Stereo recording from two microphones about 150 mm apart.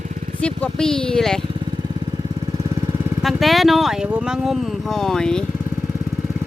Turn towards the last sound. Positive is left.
turn(degrees=5)  # may be behind; listen again after turning